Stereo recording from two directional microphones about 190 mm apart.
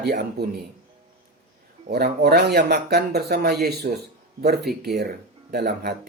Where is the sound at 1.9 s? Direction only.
60° right (ahead or behind).